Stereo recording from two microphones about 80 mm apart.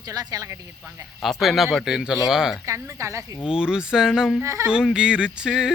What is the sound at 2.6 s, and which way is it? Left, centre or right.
Speech, right.